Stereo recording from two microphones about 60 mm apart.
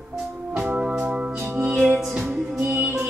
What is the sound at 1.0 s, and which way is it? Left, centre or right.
Organ, right.